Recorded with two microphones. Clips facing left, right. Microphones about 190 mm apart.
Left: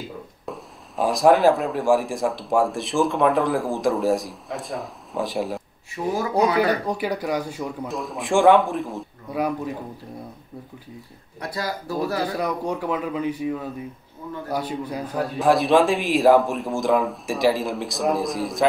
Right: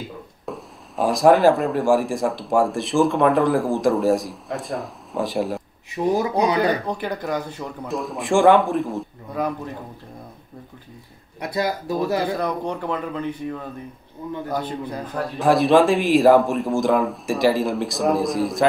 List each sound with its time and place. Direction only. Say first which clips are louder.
0.5 s speech: right 3 dB; centre (ahead or behind)
6.0 s speech: right 5 dB; 20° right (ahead or behind)
6.6 s a man's voice: even; 10° left (ahead or behind)
11.3 s speech: right 5 dB; 20° right (ahead or behind)
12.4 s a man's voice: even; 10° left (ahead or behind)